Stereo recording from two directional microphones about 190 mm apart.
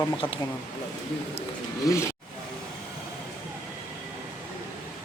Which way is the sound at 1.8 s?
15° left (ahead or behind).